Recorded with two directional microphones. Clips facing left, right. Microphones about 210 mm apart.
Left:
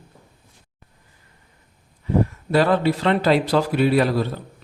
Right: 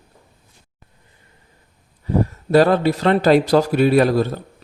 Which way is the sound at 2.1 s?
45° right (ahead or behind).